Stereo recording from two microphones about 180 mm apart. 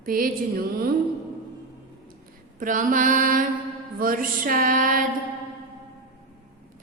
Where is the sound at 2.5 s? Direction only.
45° right (ahead or behind).